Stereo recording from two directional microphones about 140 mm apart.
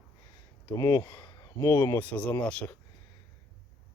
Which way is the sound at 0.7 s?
25° left (ahead or behind).